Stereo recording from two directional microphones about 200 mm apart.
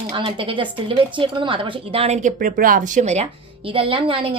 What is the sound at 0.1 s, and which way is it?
A woman's voice, 25° right (ahead or behind).